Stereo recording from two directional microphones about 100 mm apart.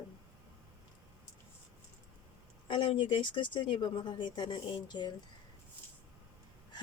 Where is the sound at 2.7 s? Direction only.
55° left (ahead or behind).